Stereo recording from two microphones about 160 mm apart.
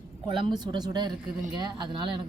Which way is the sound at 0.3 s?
30° right (ahead or behind).